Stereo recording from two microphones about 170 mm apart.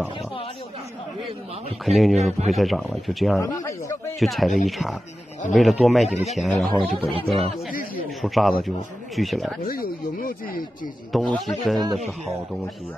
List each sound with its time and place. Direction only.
1.9 s a man's voice: centre (ahead or behind)
2.1 s a man's voice: 40° right (ahead or behind)
2.5 s a man's voice: centre (ahead or behind)
3.3 s speech: 15° left (ahead or behind)
4.2 s a man's voice: centre (ahead or behind)
7.1 s a man's voice: 35° right (ahead or behind)
8.2 s a man's voice: centre (ahead or behind)
9.7 s speech: 60° left (ahead or behind)
11.1 s a man's voice: centre (ahead or behind)